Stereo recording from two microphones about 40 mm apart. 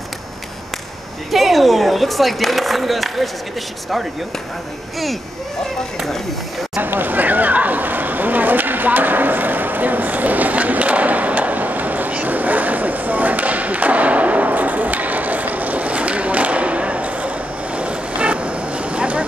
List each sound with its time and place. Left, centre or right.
1.3 s speech: centre
6.8 s a sound: right
17.7 s vehicle: right